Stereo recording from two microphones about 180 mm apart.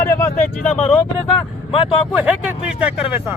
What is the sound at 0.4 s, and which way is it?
Speech, 5° left (ahead or behind).